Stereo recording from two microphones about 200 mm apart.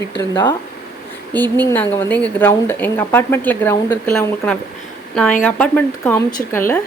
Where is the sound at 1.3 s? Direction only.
10° left (ahead or behind).